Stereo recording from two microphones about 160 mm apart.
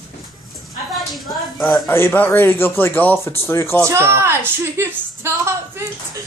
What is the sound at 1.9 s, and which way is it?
Speech, 15° left (ahead or behind).